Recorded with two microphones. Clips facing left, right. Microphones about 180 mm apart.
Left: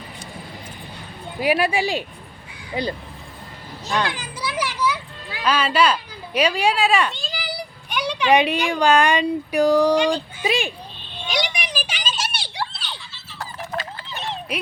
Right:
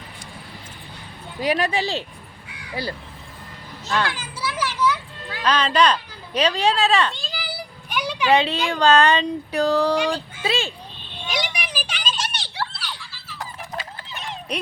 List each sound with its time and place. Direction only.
1.4 s speech: 10° left (ahead or behind)
3.8 s children playing: 15° left (ahead or behind)
7.1 s children playing: centre (ahead or behind)
8.3 s speech: 15° left (ahead or behind)
11.3 s a sound: 5° right (ahead or behind); by 13.3 s 25° left (ahead or behind)
14.1 s dog: 30° left (ahead or behind)